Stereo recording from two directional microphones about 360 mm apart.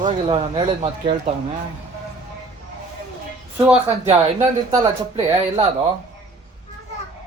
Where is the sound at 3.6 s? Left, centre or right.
Centre.